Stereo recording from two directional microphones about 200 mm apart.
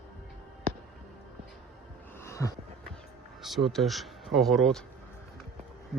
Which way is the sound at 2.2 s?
15° left (ahead or behind).